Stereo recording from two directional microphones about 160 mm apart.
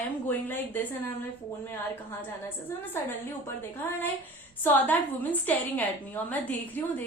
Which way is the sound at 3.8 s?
15° left (ahead or behind).